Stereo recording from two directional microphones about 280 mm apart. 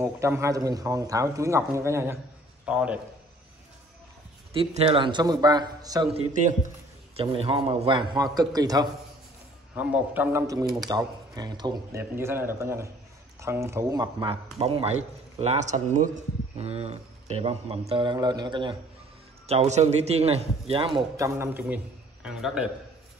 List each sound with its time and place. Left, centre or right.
0.0 s a man's voice: centre
4.6 s a man's voice: centre
6.3 s a man's voice: right; by 22.7 s centre